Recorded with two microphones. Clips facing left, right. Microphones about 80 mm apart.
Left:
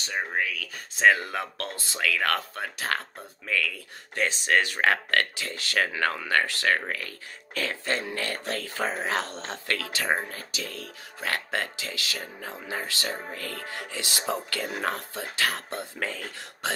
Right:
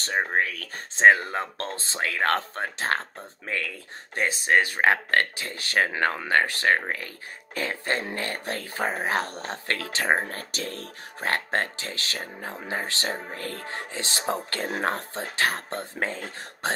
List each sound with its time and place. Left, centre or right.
0.0 s speech: right
10.2 s speech: right
12.4 s speech: right
12.6 s speech: right